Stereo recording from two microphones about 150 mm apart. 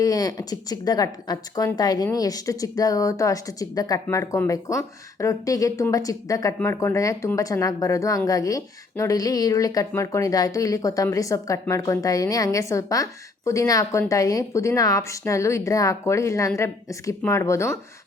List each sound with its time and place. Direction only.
0.0 s speech: 25° left (ahead or behind)